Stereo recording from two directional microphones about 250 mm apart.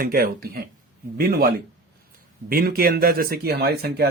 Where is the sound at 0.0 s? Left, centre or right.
Right.